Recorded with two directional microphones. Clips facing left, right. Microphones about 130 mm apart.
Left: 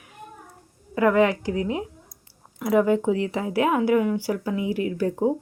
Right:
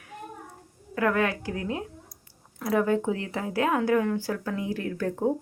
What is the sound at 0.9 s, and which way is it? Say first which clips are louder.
A woman's voice: left 6 dB; 20° left (ahead or behind).